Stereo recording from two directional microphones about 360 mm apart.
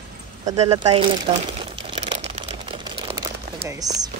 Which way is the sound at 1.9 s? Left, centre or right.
Centre.